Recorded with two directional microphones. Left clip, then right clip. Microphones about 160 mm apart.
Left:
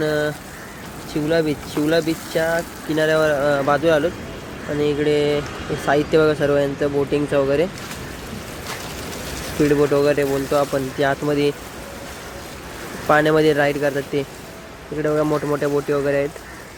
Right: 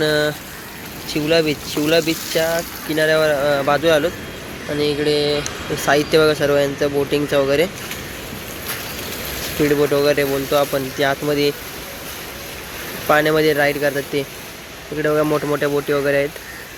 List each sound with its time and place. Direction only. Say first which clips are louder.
0.0 s speech: right 3 dB; centre (ahead or behind)
2.9 s speech: right 1 dB; 20° left (ahead or behind)
9.6 s speech: right 1 dB; 15° left (ahead or behind)
13.1 s speech: even; 20° left (ahead or behind)
15.0 s speech: right 2 dB; centre (ahead or behind)